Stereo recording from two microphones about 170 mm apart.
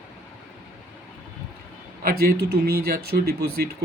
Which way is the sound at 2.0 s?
65° right (ahead or behind).